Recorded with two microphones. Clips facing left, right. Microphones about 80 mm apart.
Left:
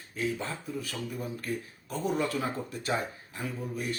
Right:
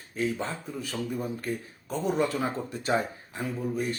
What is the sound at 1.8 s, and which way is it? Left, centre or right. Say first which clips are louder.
Speech: right 3 dB; right.